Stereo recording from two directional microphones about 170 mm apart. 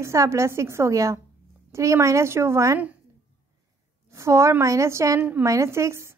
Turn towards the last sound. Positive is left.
turn(degrees=-15)  # may be behind; listen again after turning